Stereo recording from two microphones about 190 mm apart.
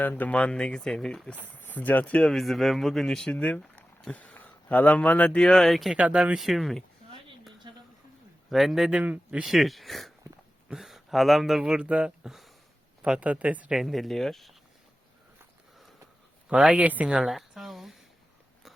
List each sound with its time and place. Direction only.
0.0 s speech: 10° left (ahead or behind)
8.4 s speech: centre (ahead or behind)
16.5 s speech: 5° right (ahead or behind)